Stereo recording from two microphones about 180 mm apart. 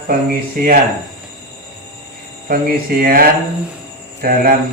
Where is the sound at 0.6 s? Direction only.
55° right (ahead or behind).